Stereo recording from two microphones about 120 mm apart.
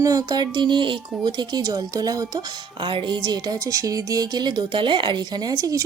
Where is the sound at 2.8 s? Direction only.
45° right (ahead or behind); by 5.8 s 30° right (ahead or behind).